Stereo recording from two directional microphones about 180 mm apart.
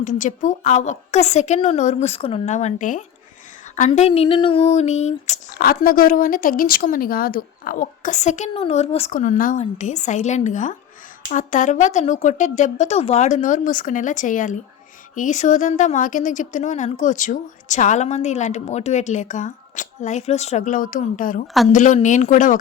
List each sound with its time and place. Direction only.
0.0 s a woman's voice: 45° left (ahead or behind)
5.5 s a woman's voice: 55° left (ahead or behind); by 9.1 s 35° left (ahead or behind)
9.1 s a woman's voice: 45° left (ahead or behind)
21.4 s a woman's voice: centre (ahead or behind)
21.7 s a woman's voice: 45° left (ahead or behind)